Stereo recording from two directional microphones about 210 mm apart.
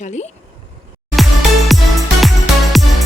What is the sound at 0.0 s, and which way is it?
Speech, 35° left (ahead or behind).